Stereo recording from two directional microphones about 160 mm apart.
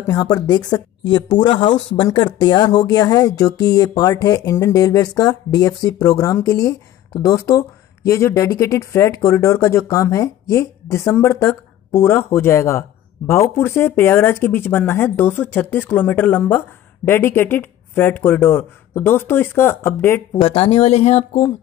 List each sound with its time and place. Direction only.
0.0 s speech: 25° left (ahead or behind)
20.3 s speech: 35° left (ahead or behind)